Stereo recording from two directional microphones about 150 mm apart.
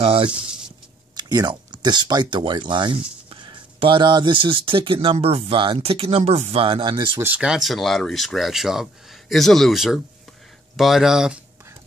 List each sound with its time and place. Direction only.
0.0 s speech: 40° right (ahead or behind)
1.1 s speech: 25° right (ahead or behind)
7.2 s speech: 10° right (ahead or behind)